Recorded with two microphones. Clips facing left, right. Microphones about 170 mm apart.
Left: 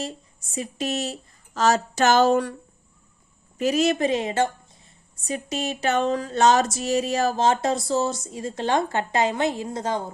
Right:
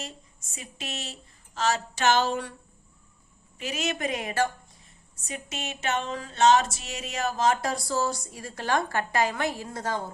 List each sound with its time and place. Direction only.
0.5 s a woman's voice: 40° left (ahead or behind)
3.6 s speech: 35° left (ahead or behind)
5.2 s speech: 35° left (ahead or behind); by 10.0 s 20° left (ahead or behind)